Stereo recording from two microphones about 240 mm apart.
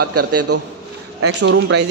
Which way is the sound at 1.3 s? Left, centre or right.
Right.